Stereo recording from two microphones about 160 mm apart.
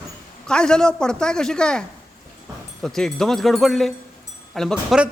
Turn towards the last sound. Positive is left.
turn(degrees=0)  # may be behind; listen again after turning